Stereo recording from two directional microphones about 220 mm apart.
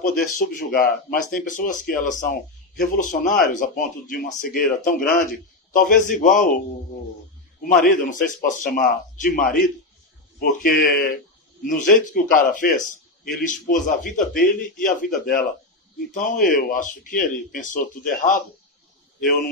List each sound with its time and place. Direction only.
0.2 s speech: 40° left (ahead or behind)
7.8 s a man's voice: 40° left (ahead or behind)